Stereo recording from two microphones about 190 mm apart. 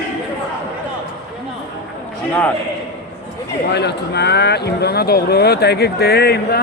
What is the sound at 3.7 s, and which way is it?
Speech, 60° left (ahead or behind).